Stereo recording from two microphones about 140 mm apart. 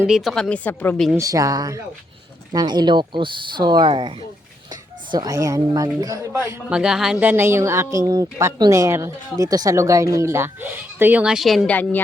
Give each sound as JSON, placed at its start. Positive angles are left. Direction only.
{"t": 0.1, "sound": "a woman's voice", "side_deg": 0}
{"t": 1.1, "sound": "speech", "side_deg": -25}
{"t": 5.1, "sound": "speech", "side_deg": -25}
{"t": 6.7, "sound": "speech", "side_deg": -5}